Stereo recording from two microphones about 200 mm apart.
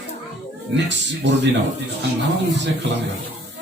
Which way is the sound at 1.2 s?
60° right (ahead or behind).